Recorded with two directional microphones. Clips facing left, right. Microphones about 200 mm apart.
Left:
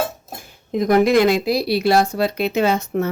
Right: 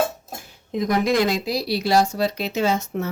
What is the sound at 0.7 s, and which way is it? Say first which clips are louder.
Speech: left 6 dB; 55° left (ahead or behind).